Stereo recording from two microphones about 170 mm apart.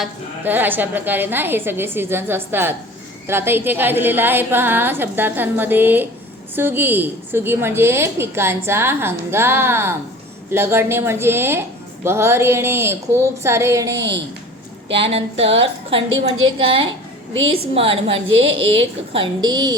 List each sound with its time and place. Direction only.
0.0 s a woman's voice: 10° right (ahead or behind)
14.8 s a woman's voice: 35° right (ahead or behind)
18.5 s a woman's voice: 90° right
19.1 s a woman's voice: 30° right (ahead or behind)